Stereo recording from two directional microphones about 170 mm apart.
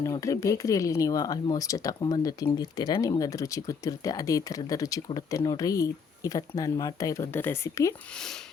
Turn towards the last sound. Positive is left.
turn(degrees=15)  # may be behind; listen again after turning